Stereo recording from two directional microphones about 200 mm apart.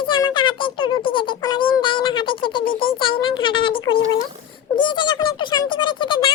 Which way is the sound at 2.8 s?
25° left (ahead or behind).